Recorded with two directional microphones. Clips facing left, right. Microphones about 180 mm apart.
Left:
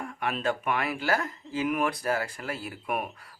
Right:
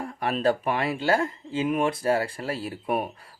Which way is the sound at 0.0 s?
35° right (ahead or behind).